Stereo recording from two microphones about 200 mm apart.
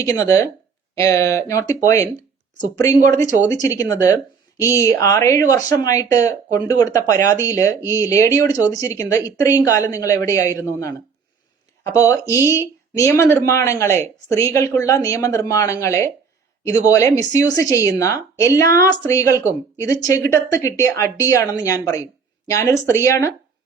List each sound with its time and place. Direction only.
0.0 s a woman's voice: 15° left (ahead or behind)
12.3 s speech: 15° right (ahead or behind)
12.5 s a woman's voice: 15° left (ahead or behind)